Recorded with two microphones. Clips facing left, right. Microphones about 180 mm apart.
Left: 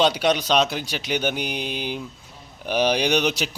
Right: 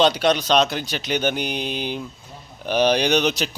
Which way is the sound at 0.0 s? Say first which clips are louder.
Right 2 dB; 10° left (ahead or behind).